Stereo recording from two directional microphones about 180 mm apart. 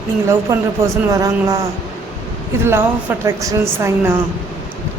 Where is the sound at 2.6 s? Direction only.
10° right (ahead or behind).